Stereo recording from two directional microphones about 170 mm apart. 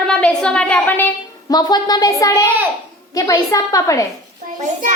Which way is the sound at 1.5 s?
25° left (ahead or behind).